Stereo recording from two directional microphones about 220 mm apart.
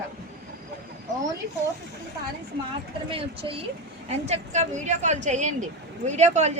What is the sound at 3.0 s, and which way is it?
Speech, 25° right (ahead or behind).